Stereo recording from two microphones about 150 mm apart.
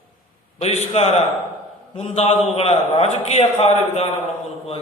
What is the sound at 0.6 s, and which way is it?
A man's voice, 45° left (ahead or behind).